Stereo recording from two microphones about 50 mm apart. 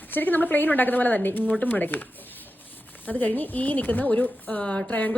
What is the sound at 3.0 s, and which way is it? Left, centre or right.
A woman's voice, left.